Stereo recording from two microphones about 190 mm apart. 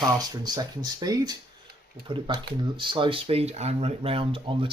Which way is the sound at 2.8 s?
25° right (ahead or behind).